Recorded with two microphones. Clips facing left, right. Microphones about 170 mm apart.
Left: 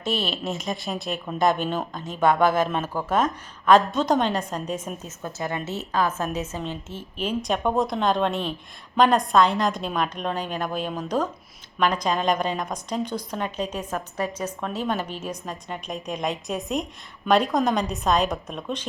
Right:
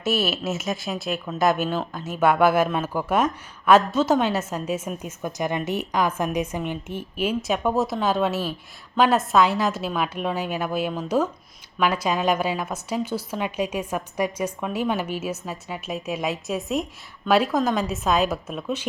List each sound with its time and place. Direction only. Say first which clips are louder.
0.0 s a woman's voice: right 3 dB; 5° right (ahead or behind)